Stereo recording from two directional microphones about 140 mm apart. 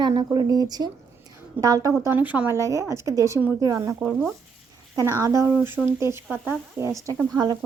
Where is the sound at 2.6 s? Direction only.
20° right (ahead or behind).